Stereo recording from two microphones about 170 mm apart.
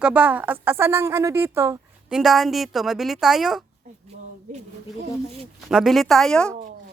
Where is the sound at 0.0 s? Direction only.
10° right (ahead or behind).